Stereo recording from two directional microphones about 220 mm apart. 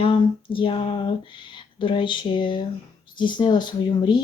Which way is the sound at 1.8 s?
20° left (ahead or behind).